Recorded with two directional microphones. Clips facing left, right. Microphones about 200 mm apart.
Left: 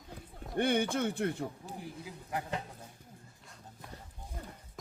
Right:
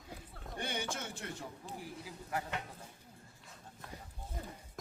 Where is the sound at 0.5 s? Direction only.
60° left (ahead or behind).